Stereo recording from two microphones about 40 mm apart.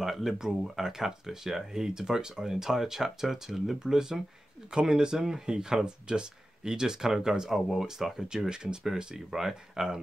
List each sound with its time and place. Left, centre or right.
0.0 s speech: centre